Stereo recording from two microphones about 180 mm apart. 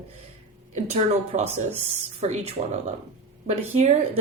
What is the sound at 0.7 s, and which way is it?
Speech, 35° right (ahead or behind).